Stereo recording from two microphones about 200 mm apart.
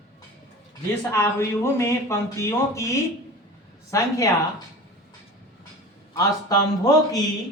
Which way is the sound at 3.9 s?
15° left (ahead or behind).